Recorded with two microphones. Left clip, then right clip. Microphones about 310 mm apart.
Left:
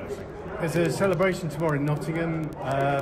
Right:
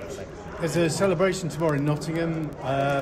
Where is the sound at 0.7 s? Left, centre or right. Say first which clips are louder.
Right 1 dB; right.